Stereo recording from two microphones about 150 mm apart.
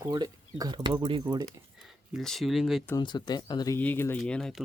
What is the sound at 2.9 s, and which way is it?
Speech, 30° left (ahead or behind).